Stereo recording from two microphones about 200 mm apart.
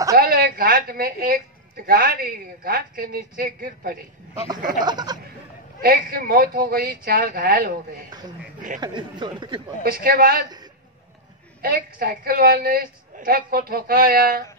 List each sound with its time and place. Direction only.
0.2 s a sound: 50° right (ahead or behind)
1.9 s a woman's voice: 50° right (ahead or behind)
4.8 s speech: 20° right (ahead or behind)
5.8 s a woman's voice: 50° right (ahead or behind)
8.8 s speech: 20° right (ahead or behind)
9.8 s a woman's voice: 45° right (ahead or behind)
11.6 s a woman's voice: 45° right (ahead or behind)